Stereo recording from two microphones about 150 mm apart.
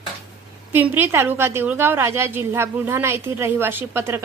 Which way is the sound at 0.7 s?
15° right (ahead or behind).